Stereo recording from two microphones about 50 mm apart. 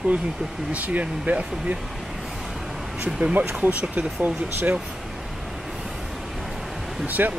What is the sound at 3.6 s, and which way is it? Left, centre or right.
Speech, right.